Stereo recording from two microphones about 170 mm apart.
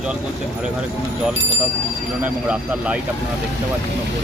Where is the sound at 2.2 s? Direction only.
10° right (ahead or behind).